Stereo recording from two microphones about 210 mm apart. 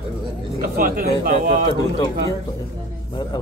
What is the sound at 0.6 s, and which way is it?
Speech, 40° right (ahead or behind).